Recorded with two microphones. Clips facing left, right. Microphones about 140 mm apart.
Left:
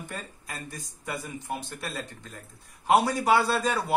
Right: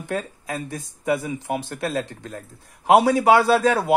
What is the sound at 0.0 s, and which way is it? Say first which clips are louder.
Speech: right 11 dB; 85° right.